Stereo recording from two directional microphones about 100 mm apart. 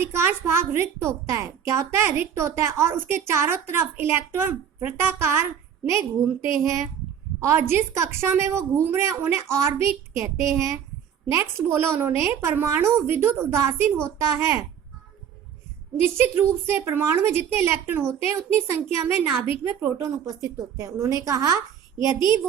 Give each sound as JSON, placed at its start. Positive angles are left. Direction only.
{"t": 0.0, "sound": "a woman's voice", "side_deg": -25}
{"t": 16.0, "sound": "a woman's voice", "side_deg": -25}
{"t": 21.9, "sound": "a woman's voice", "side_deg": 50}